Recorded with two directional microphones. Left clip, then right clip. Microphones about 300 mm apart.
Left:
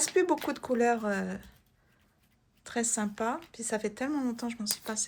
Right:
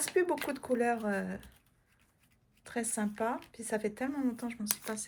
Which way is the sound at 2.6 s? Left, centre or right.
Centre.